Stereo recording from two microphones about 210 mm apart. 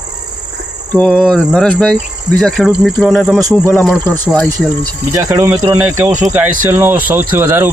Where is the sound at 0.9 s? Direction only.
5° left (ahead or behind).